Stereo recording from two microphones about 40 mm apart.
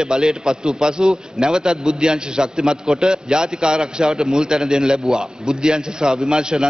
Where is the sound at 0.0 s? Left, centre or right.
Right.